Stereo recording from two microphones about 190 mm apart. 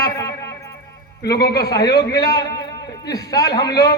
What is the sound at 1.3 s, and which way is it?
Speech, 60° left (ahead or behind).